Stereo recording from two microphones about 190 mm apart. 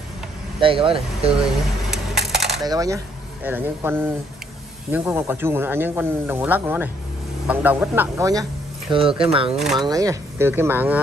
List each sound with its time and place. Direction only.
0.6 s speech: 25° right (ahead or behind)
2.2 s coin: centre (ahead or behind)
2.6 s speech: 20° right (ahead or behind)
8.9 s speech: 30° right (ahead or behind)
9.8 s speech: 20° right (ahead or behind)